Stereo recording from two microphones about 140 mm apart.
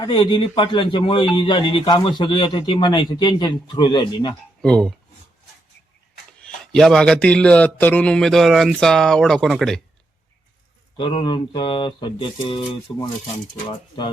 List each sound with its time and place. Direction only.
0.0 s a man's voice: 35° left (ahead or behind)
4.6 s speech: 5° left (ahead or behind)
6.4 s speech: 5° left (ahead or behind)
10.9 s a man's voice: 35° left (ahead or behind)